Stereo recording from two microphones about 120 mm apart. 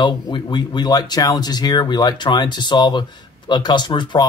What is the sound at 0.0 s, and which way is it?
Speech, 40° left (ahead or behind).